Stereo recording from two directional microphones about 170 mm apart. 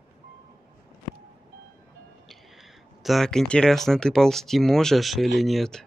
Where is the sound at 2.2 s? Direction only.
Centre (ahead or behind).